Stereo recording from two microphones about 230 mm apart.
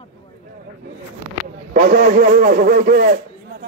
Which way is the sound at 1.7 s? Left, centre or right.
Right.